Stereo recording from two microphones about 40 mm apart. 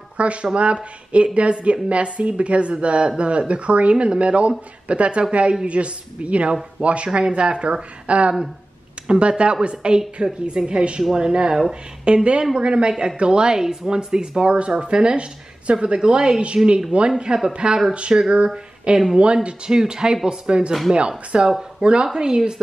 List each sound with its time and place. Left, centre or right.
0.2 s a woman's voice: right
14.4 s speech: right
21.5 s speech: centre
21.8 s speech: right